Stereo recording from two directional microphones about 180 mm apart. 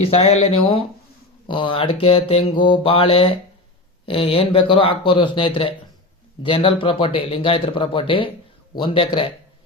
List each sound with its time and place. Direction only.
0.1 s speech: 35° left (ahead or behind)